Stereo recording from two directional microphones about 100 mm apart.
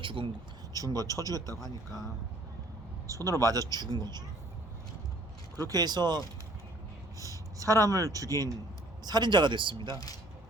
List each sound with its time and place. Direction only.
0.0 s speech: 55° right (ahead or behind)
0.7 s speech: 40° right (ahead or behind)
3.1 s speech: 35° right (ahead or behind)
5.6 s speech: 40° right (ahead or behind)
7.6 s speech: 35° right (ahead or behind); by 10.0 s 55° right (ahead or behind)